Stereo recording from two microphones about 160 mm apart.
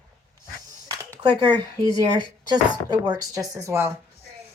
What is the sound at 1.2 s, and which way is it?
Speech, 30° right (ahead or behind).